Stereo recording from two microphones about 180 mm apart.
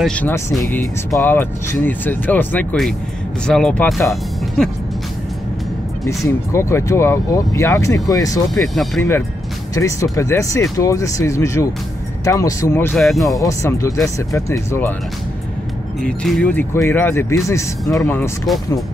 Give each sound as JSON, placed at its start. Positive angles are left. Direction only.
{"t": 0.0, "sound": "speech", "side_deg": 10}
{"t": 6.0, "sound": "speech", "side_deg": 15}
{"t": 9.8, "sound": "speech", "side_deg": 15}
{"t": 12.9, "sound": "speech", "side_deg": 0}
{"t": 13.3, "sound": "speech", "side_deg": 20}
{"t": 16.0, "sound": "speech", "side_deg": 5}